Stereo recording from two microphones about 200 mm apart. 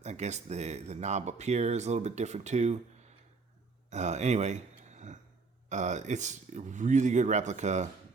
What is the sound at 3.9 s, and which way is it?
Speech, 35° right (ahead or behind).